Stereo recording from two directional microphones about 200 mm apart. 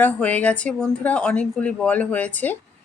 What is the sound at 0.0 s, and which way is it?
A woman's voice, 5° left (ahead or behind).